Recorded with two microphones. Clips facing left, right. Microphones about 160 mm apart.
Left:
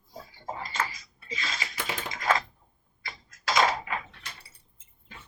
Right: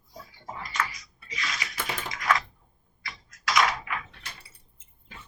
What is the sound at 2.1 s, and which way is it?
Typewriter, 30° left (ahead or behind).